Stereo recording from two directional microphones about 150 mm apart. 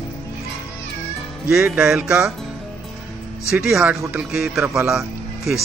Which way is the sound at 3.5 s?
Centre (ahead or behind).